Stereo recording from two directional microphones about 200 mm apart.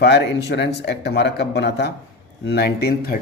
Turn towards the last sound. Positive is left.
turn(degrees=50)  # may be behind; listen again after turning